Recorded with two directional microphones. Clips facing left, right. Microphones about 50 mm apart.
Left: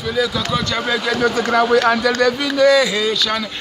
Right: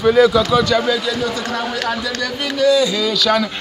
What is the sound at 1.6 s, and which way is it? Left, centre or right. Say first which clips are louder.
Speech: left 11 dB; left.